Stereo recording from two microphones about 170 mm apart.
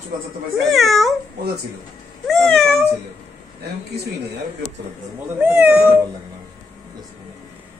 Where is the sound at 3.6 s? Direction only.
75° right (ahead or behind).